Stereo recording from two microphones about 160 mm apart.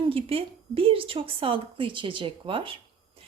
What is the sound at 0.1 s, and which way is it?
A woman's voice, 35° right (ahead or behind).